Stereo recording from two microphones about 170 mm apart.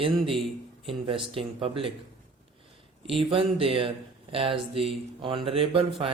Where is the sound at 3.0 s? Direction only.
35° right (ahead or behind).